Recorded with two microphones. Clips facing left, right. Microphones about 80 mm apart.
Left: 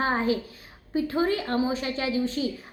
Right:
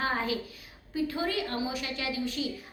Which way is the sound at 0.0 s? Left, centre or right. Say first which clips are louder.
Left 5 dB; left.